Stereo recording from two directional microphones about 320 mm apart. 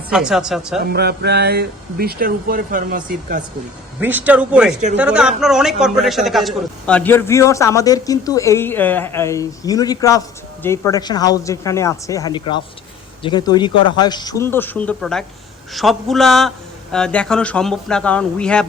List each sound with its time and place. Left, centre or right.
0.1 s speech: centre
0.9 s speech: right
4.0 s a man's voice: centre